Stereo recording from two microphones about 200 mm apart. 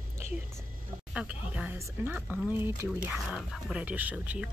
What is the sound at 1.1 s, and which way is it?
Speech, 5° right (ahead or behind).